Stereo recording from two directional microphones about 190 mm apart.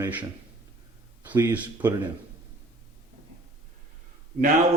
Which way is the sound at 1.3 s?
10° right (ahead or behind).